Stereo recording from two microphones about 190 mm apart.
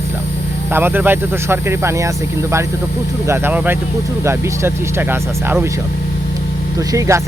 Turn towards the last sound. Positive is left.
turn(degrees=-15)  # may be behind; listen again after turning